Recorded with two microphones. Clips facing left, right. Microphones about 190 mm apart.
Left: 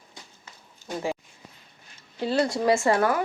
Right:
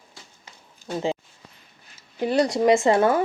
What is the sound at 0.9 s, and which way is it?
Speech, 20° right (ahead or behind).